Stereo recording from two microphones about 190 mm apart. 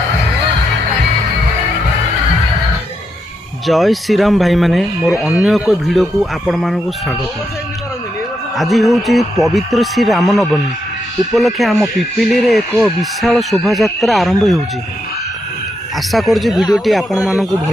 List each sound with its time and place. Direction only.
3.7 s speech: centre (ahead or behind)
8.5 s speech: centre (ahead or behind)
16.1 s speech: centre (ahead or behind)